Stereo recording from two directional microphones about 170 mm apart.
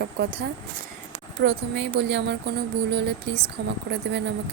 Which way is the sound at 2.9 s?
80° right.